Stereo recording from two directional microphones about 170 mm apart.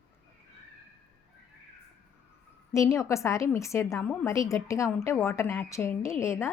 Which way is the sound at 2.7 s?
15° left (ahead or behind).